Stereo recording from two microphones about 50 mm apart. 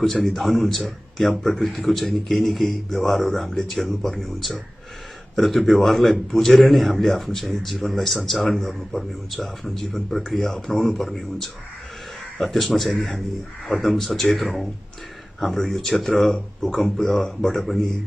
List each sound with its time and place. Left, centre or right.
0.0 s a man's voice: centre
12.9 s a man's voice: centre
13.7 s a man's voice: centre